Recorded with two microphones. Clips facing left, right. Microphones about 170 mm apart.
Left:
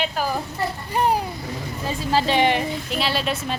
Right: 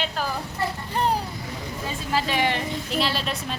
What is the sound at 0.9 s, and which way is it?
Vehicle, 15° left (ahead or behind).